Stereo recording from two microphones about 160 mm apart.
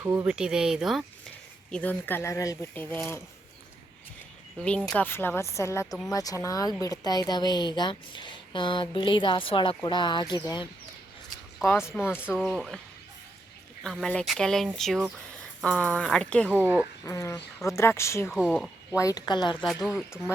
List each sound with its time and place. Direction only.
0.0 s speech: 20° right (ahead or behind)
0.3 s speech: 5° right (ahead or behind)
1.7 s speech: 10° left (ahead or behind)
4.9 s speech: 10° left (ahead or behind)
11.6 s speech: 15° left (ahead or behind)
12.3 s speech: centre (ahead or behind)
13.8 s speech: centre (ahead or behind)
16.5 s speech: 10° right (ahead or behind)
17.1 s speech: 20° left (ahead or behind)
18.3 s speech: centre (ahead or behind)
18.9 s speech: 25° left (ahead or behind)
19.6 s speech: 5° right (ahead or behind)